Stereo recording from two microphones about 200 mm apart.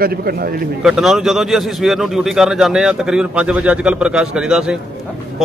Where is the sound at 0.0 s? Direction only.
50° right (ahead or behind).